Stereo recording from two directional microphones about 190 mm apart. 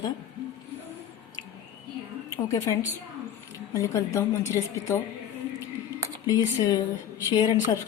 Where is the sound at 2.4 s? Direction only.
15° left (ahead or behind).